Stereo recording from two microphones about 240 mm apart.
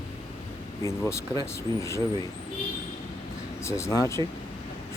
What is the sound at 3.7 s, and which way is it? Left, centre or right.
Speech, centre.